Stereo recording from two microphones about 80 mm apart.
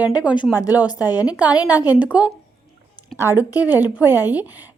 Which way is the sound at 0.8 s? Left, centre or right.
Left.